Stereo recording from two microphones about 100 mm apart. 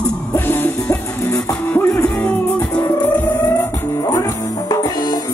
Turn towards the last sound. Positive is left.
turn(degrees=40)  # may be behind; listen again after turning